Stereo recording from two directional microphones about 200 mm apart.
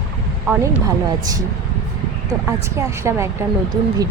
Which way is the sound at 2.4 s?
15° right (ahead or behind).